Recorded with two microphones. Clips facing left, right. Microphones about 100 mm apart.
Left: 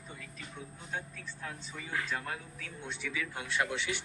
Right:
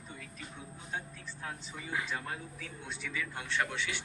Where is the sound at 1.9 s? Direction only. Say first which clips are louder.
Left 1 dB; 10° right (ahead or behind).